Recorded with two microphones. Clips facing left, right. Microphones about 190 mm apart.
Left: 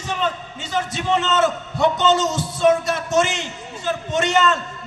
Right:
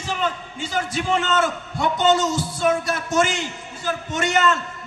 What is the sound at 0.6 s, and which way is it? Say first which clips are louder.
A man's voice: left 1 dB; 25° left (ahead or behind).